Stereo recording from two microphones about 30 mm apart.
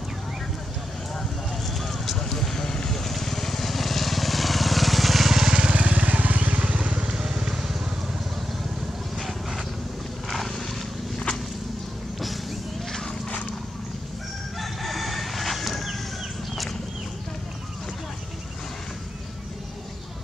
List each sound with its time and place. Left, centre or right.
1.7 s vehicle: centre
5.6 s vehicle: right
7.1 s vehicle: centre
9.2 s vehicle: centre
12.2 s a sound: centre
14.6 s crowing: centre